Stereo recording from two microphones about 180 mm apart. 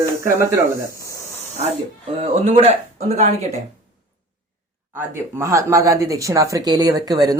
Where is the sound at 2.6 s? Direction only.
35° right (ahead or behind).